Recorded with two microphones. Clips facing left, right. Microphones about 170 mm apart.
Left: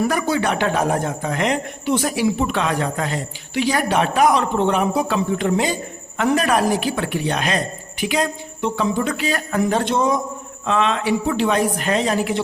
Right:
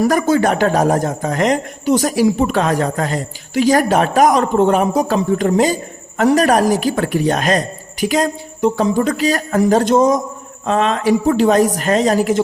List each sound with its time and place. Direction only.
0.0 s a man's voice: 45° right (ahead or behind)